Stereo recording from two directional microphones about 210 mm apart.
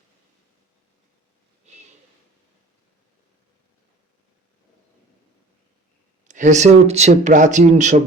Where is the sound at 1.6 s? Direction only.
30° right (ahead or behind).